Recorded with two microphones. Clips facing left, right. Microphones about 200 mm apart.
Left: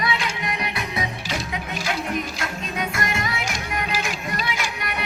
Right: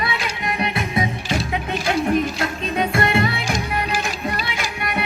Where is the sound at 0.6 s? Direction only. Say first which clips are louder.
Right 6 dB; 25° right (ahead or behind).